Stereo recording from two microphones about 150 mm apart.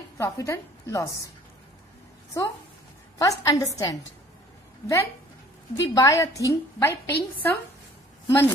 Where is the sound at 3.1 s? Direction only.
25° left (ahead or behind).